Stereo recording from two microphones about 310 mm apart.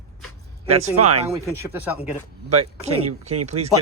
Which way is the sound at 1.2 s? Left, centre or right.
Centre.